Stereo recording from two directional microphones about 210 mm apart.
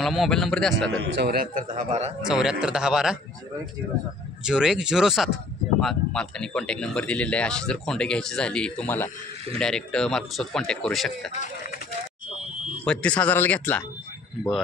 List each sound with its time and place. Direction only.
0.0 s speech: centre (ahead or behind)
1.2 s a man's voice: 45° right (ahead or behind)
1.8 s speech: 30° right (ahead or behind)
2.2 s speech: 5° right (ahead or behind)
4.5 s speech: 5° right (ahead or behind)
12.8 s speech: 5° left (ahead or behind)